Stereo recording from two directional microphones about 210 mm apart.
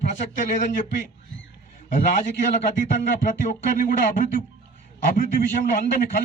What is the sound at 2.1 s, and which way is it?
A man's voice, 40° left (ahead or behind).